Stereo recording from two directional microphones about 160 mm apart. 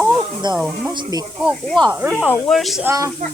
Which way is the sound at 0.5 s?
5° right (ahead or behind).